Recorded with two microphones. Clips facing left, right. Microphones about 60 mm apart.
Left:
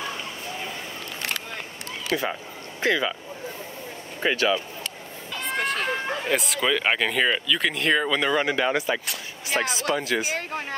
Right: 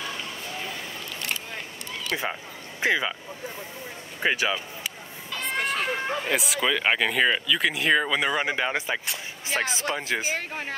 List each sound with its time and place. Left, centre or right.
2.1 s speech: centre
4.2 s speech: centre
5.4 s speech: centre; by 10.3 s right